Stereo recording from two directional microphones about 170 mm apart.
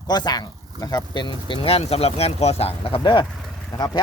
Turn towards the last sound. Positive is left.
turn(degrees=0)  # may be behind; listen again after turning